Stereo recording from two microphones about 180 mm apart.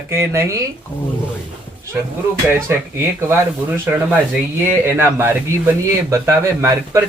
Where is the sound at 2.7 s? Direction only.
15° right (ahead or behind).